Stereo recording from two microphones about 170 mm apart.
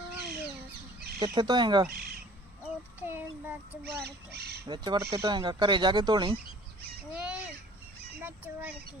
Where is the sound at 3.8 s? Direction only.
70° right (ahead or behind).